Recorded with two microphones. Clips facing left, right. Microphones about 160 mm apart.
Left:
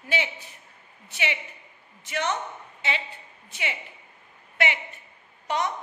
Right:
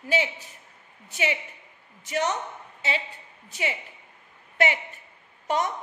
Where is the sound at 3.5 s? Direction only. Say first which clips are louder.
Right 3 dB; 40° right (ahead or behind).